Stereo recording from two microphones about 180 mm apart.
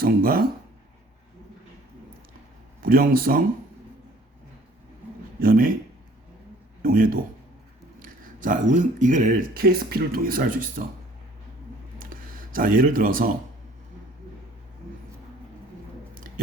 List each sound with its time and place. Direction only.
0.0 s speech: 55° right (ahead or behind)
2.8 s speech: 55° right (ahead or behind)
5.4 s speech: 50° right (ahead or behind)
6.8 s speech: 50° right (ahead or behind)
11.9 s a sound: 50° right (ahead or behind)
12.5 s speech: 50° right (ahead or behind)